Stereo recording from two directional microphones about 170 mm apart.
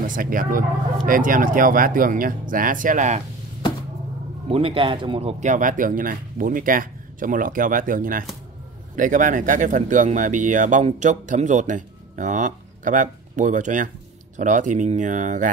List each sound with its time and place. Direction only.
0.0 s speech: 55° right (ahead or behind)
4.5 s speech: 35° right (ahead or behind)
5.4 s speech: 50° right (ahead or behind)